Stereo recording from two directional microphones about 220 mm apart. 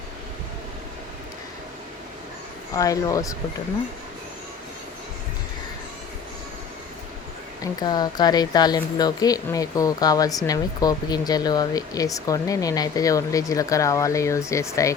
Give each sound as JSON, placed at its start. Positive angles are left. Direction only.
{"t": 2.7, "sound": "a woman's voice", "side_deg": 15}
{"t": 7.6, "sound": "a woman's voice", "side_deg": 20}